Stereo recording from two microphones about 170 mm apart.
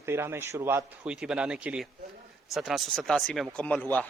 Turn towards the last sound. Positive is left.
turn(degrees=5)  # may be behind; listen again after turning